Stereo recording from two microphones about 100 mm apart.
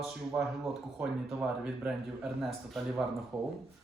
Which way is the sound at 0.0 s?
Centre (ahead or behind).